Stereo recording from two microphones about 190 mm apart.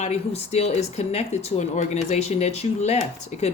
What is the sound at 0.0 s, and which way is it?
Speech, 35° left (ahead or behind).